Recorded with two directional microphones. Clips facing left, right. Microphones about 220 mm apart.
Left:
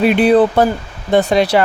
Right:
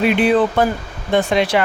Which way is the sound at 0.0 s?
40° left (ahead or behind).